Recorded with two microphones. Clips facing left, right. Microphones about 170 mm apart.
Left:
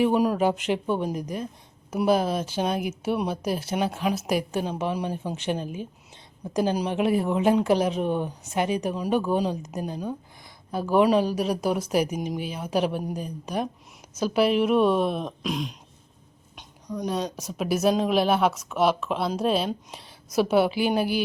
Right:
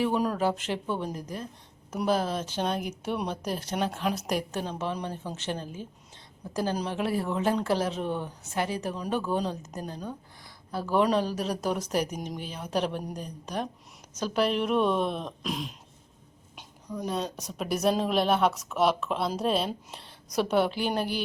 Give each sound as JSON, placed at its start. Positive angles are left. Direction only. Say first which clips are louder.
{"t": 0.0, "sound": "a woman's voice", "louder": "left 5 dB", "side_deg": 15}